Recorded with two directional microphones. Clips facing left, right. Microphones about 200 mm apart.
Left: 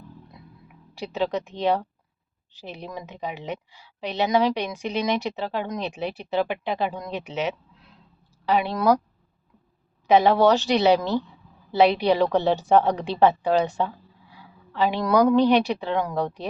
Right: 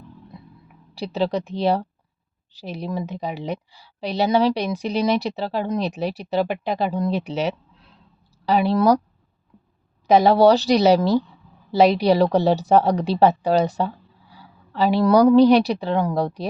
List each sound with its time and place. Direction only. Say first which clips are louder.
0.9 s a woman's voice: right 3 dB; 35° right (ahead or behind)
10.1 s a woman's voice: right 3 dB; 40° right (ahead or behind)